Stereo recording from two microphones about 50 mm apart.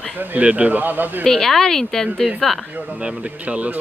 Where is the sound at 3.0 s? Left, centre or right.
Right.